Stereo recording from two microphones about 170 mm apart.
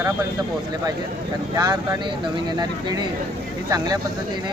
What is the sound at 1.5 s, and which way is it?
Speech, 20° right (ahead or behind).